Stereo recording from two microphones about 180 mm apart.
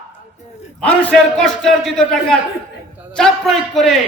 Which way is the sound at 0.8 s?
5° left (ahead or behind).